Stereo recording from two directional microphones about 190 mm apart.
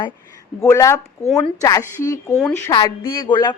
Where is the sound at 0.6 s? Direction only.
15° left (ahead or behind).